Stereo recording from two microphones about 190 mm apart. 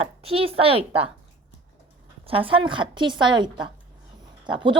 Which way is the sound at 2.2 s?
30° right (ahead or behind).